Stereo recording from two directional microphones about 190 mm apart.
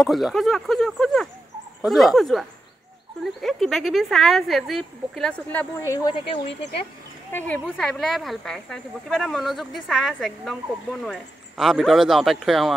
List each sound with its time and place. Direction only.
0.0 s speech: centre (ahead or behind)
3.4 s speech: centre (ahead or behind); by 6.2 s 20° left (ahead or behind)
7.3 s speech: 10° left (ahead or behind)